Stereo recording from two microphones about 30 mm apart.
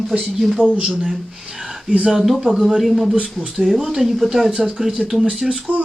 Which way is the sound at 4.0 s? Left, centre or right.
Centre.